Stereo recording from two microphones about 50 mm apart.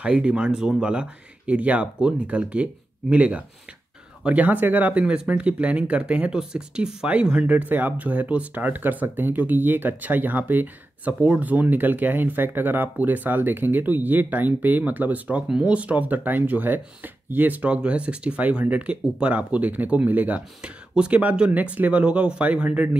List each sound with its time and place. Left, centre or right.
0.0 s speech: right
4.9 s speech: right
7.4 s speech: right
20.6 s speech: centre